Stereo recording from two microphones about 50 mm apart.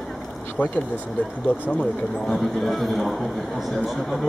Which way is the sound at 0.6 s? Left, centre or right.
Left.